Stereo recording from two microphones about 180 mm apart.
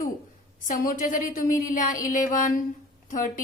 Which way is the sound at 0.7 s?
50° left (ahead or behind).